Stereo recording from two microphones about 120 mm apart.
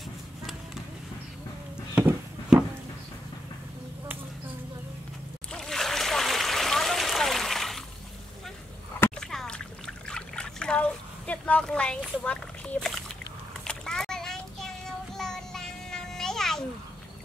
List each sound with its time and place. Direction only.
2.0 s a sound: 10° right (ahead or behind)
5.5 s splash: 5° left (ahead or behind)
9.2 s splash: 5° left (ahead or behind)
13.7 s child singing: 5° left (ahead or behind)